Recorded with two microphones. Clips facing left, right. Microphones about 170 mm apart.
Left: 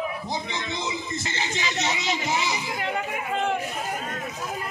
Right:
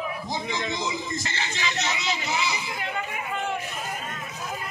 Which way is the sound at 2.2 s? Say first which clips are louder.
Left 1 dB; 45° left (ahead or behind).